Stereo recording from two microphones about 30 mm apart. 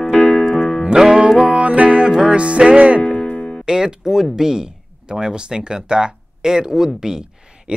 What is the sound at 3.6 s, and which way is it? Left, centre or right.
Speech, right.